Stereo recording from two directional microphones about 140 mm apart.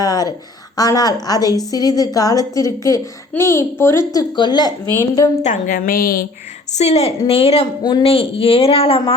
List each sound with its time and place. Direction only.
0.0 s a woman's voice: 25° left (ahead or behind)
5.4 s a woman's voice: 65° left (ahead or behind); by 6.2 s 90° left
6.7 s speech: 50° left (ahead or behind)
7.8 s a woman's voice: 30° left (ahead or behind)
8.0 s speech: 45° left (ahead or behind)